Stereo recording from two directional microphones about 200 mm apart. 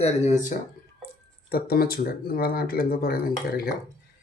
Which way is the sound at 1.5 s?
50° left (ahead or behind).